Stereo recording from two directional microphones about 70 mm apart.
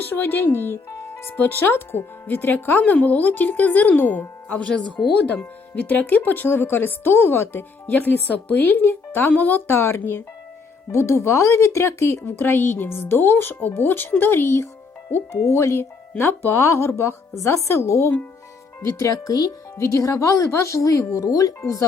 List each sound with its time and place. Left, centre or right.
0.0 s speech: left
19.7 s speech: left
21.2 s speech: left